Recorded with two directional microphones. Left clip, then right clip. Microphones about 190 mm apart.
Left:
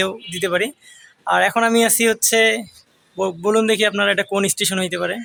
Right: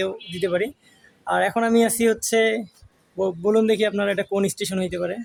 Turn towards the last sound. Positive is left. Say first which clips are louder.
# left 4 dB
turn(degrees=0)  # may be behind; listen again after turning